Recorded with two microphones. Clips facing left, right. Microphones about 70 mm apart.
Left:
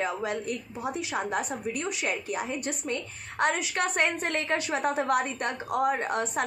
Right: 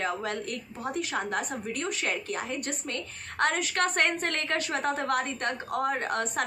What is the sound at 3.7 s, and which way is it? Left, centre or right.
A woman's voice, centre.